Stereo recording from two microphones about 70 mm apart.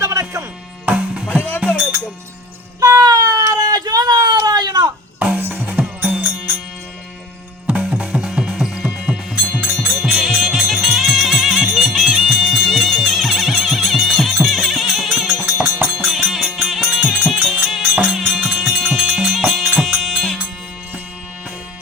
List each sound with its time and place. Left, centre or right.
0.0 s music: right
0.9 s music: centre
1.4 s music: left
2.8 s a sound: right
5.2 s music: right
7.7 s music: centre
15.4 s music: right
16.0 s music: centre
18.3 s music: centre
18.7 s music: centre